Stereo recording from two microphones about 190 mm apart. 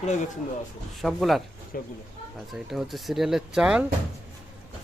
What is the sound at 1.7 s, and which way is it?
Speech, 45° left (ahead or behind).